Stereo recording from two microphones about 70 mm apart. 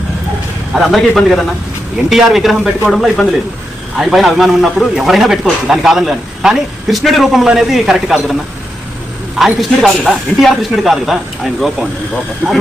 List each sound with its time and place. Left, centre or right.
0.7 s a man's voice: centre
9.4 s a man's voice: centre
12.4 s speech: centre